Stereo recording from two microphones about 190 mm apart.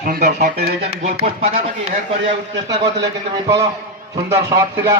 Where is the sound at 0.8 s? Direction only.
35° right (ahead or behind).